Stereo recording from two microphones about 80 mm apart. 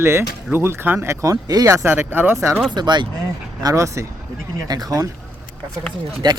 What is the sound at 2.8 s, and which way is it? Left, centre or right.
Speech, right.